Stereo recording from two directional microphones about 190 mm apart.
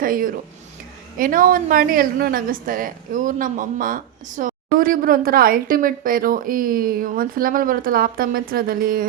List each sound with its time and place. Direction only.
0.0 s a woman's voice: 45° right (ahead or behind)